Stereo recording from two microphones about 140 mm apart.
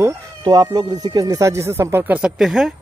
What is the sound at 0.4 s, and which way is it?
Speech, 30° right (ahead or behind).